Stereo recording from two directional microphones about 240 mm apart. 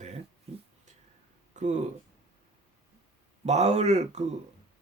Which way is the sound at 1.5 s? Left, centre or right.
Right.